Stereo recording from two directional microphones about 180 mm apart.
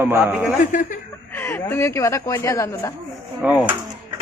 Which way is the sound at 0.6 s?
50° left (ahead or behind).